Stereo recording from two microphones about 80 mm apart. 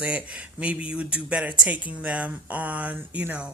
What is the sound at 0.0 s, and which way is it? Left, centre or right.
Speech, centre.